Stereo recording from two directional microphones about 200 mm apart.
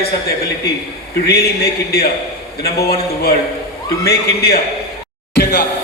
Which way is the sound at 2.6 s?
50° left (ahead or behind).